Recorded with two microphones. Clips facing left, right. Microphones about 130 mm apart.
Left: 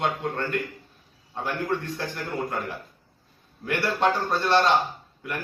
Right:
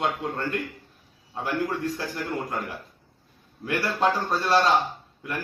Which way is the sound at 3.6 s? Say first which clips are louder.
Even; 5° right (ahead or behind).